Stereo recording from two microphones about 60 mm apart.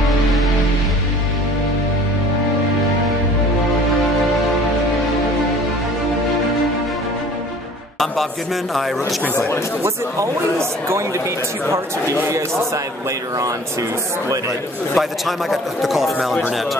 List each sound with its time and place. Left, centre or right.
9.8 s speech: right
12.2 s speech: right
15.0 s a man's voice: centre